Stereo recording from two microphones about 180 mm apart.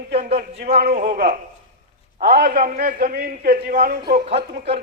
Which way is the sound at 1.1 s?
50° right (ahead or behind).